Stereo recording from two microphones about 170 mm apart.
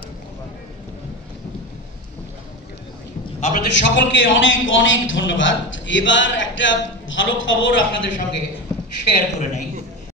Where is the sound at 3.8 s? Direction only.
90° left.